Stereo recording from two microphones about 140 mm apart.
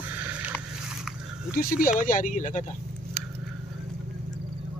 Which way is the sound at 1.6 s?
90° left.